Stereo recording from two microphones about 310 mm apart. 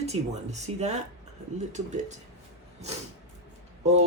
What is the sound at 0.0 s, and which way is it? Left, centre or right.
Speech, right.